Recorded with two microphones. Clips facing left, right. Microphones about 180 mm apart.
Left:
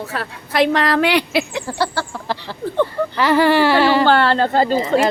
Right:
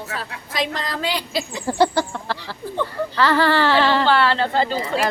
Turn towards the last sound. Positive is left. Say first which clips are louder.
# left 5 dB
turn(degrees=45)  # may be behind; listen again after turning